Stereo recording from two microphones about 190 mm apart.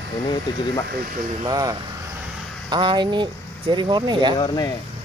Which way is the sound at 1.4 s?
20° right (ahead or behind).